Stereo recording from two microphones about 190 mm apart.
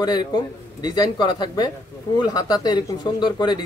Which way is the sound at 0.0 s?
20° left (ahead or behind).